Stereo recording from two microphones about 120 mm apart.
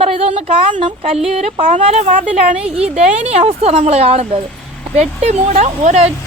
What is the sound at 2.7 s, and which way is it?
Speech, 10° right (ahead or behind).